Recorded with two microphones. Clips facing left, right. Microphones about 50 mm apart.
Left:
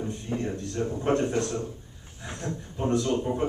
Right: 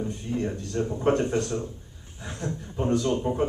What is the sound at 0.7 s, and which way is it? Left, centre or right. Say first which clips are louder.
Speech: right 3 dB; centre.